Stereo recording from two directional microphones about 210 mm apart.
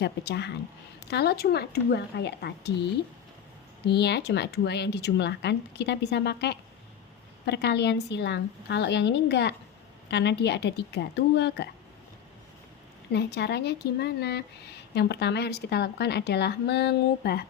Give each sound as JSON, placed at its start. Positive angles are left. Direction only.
{"t": 0.0, "sound": "speech", "side_deg": 55}
{"t": 3.8, "sound": "speech", "side_deg": 55}
{"t": 13.1, "sound": "speech", "side_deg": 50}